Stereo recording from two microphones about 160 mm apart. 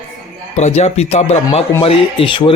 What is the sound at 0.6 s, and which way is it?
Speech, 45° left (ahead or behind).